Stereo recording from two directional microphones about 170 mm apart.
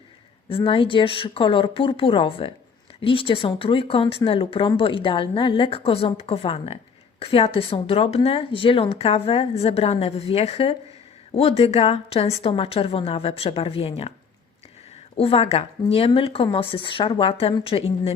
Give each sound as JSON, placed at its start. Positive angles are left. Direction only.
{"t": 0.4, "sound": "speech", "side_deg": 30}
{"t": 15.1, "sound": "speech", "side_deg": 35}